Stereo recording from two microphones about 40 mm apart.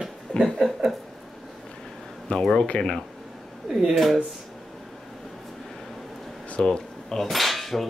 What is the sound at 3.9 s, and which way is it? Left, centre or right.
Speech, centre.